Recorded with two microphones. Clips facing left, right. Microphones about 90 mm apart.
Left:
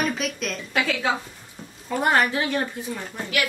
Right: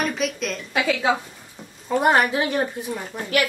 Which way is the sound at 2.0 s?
20° right (ahead or behind).